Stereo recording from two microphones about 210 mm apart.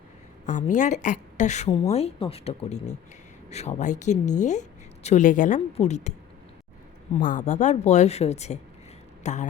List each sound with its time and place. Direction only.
0.4 s speech: 35° left (ahead or behind)
7.2 s speech: 35° left (ahead or behind)